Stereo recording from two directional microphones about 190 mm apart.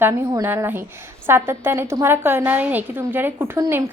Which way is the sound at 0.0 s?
15° right (ahead or behind).